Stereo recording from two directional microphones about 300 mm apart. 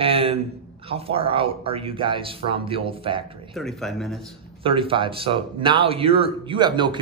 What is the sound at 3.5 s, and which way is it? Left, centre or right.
Speech, centre.